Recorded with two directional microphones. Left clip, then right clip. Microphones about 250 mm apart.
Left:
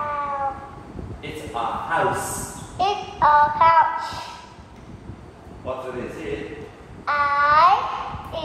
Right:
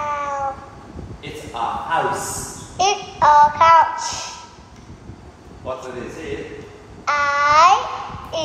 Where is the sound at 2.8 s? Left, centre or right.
Right.